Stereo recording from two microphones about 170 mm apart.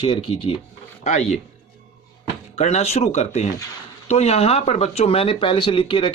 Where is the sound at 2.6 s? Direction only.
40° left (ahead or behind).